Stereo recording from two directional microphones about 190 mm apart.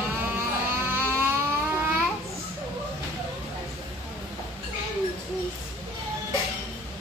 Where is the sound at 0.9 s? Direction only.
10° right (ahead or behind).